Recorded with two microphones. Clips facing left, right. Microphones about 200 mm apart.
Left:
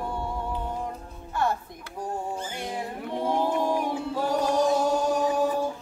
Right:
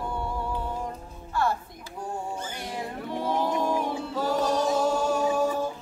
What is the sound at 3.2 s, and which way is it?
A capella, 15° left (ahead or behind).